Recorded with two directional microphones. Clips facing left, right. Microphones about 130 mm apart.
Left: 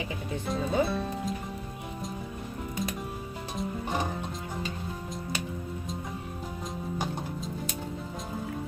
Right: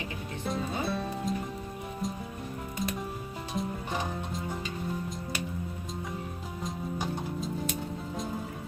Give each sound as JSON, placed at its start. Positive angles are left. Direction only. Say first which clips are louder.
{"t": 0.4, "sound": "music", "louder": "left 4 dB", "side_deg": 0}